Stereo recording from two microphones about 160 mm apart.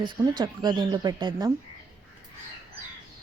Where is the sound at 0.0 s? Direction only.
30° right (ahead or behind).